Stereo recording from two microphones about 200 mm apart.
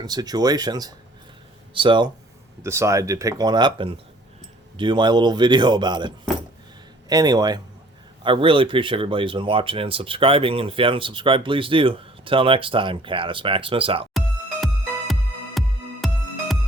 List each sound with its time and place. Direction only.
0.0 s speech: 20° right (ahead or behind)
2.6 s speech: 15° right (ahead or behind)
14.1 s music: centre (ahead or behind)